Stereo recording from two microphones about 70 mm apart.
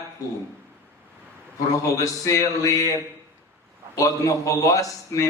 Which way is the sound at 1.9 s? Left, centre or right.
Left.